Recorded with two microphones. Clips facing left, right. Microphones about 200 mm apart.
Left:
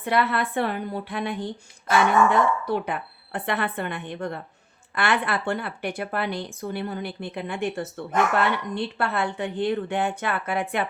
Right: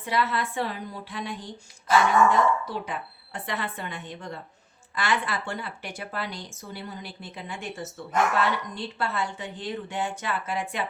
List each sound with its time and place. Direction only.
0.0 s a woman's voice: 60° left (ahead or behind)